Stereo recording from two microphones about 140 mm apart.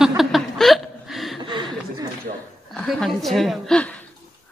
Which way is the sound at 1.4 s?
35° right (ahead or behind).